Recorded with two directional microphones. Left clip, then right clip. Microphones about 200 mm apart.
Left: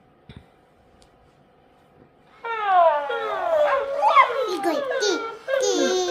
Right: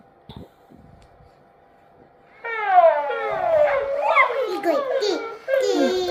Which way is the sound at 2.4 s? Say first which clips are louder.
Right 2 dB; centre (ahead or behind).